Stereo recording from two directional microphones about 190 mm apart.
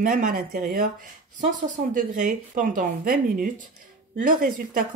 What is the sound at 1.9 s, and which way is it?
Speech, 45° right (ahead or behind).